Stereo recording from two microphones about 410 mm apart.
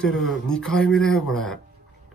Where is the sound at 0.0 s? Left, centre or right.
Centre.